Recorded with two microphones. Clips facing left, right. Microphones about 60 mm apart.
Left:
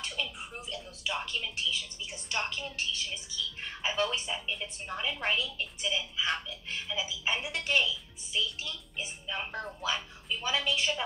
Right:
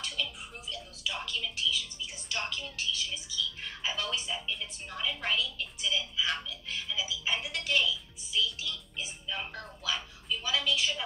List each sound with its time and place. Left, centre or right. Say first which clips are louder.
0.0 s speech: even; left